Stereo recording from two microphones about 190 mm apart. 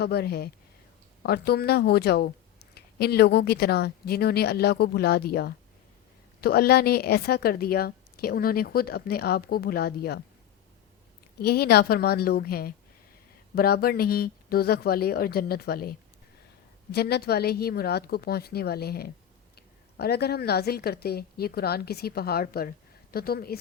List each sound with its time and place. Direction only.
0.0 s speech: 55° left (ahead or behind)
11.3 s speech: 55° left (ahead or behind)